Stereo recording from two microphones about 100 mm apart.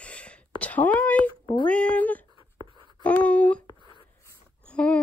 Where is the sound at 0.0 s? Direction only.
10° left (ahead or behind).